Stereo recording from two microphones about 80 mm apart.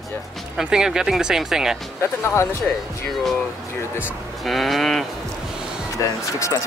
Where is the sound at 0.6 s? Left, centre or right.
Centre.